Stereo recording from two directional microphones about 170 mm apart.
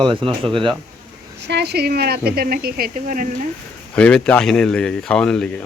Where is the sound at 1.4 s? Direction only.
75° right (ahead or behind); by 3.5 s 50° right (ahead or behind).